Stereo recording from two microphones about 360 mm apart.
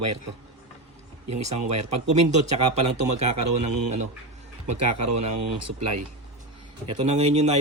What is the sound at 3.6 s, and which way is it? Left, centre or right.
Speech, right.